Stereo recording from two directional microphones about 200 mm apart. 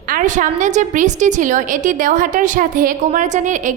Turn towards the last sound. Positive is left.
turn(degrees=-40)  # may be behind; listen again after turning